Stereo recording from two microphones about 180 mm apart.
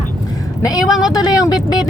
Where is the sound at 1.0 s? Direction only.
20° left (ahead or behind).